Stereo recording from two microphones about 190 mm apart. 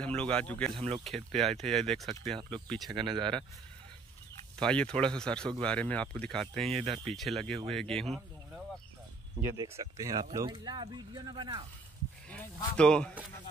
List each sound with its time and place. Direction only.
0.0 s speech: 5° left (ahead or behind)
0.7 s speech: 30° right (ahead or behind)
1.0 s speech: centre (ahead or behind)
2.0 s speech: 25° right (ahead or behind)
4.6 s speech: 5° left (ahead or behind)
6.6 s speech: 30° right (ahead or behind)
7.2 s speech: centre (ahead or behind)
9.6 s speech: 15° right (ahead or behind)
12.3 s speech: 5° left (ahead or behind)